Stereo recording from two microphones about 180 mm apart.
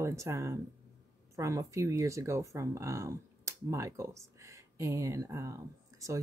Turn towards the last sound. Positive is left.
turn(degrees=-15)  # may be behind; listen again after turning